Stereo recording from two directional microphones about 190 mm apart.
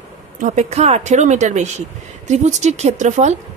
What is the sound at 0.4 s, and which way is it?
Speech, 40° right (ahead or behind).